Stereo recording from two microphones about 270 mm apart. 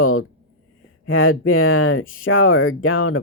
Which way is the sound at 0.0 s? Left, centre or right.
Left.